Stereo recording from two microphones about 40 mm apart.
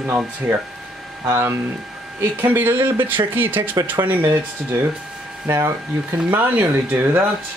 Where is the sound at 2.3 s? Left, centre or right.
Right.